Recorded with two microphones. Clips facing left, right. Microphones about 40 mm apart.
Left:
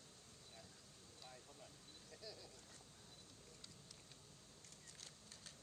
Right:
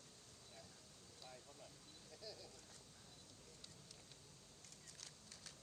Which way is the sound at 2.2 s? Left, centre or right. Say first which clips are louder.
Right 1 dB; centre.